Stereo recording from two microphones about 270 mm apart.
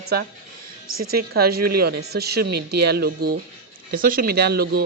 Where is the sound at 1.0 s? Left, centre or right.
Right.